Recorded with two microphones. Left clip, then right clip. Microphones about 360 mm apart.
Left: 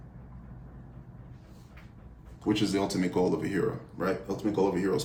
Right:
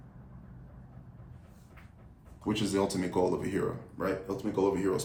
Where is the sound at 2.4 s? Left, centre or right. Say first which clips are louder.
Left 2 dB; centre.